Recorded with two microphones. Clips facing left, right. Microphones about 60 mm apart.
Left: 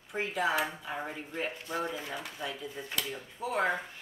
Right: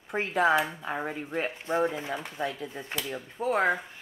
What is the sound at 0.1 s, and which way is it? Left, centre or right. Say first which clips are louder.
Speech: right 6 dB; right.